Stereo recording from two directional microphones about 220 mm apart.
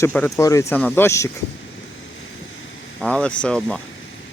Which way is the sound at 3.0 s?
5° left (ahead or behind).